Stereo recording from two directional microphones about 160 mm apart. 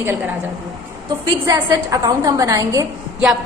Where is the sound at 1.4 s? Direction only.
20° right (ahead or behind).